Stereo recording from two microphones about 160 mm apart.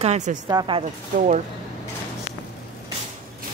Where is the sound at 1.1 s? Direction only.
50° right (ahead or behind).